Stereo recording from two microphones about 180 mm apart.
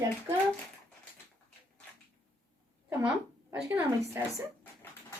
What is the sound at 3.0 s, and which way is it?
A woman's voice, 10° right (ahead or behind).